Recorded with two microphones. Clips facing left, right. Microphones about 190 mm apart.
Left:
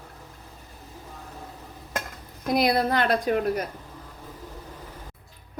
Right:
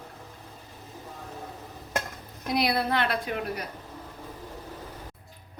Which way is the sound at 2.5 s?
45° left (ahead or behind).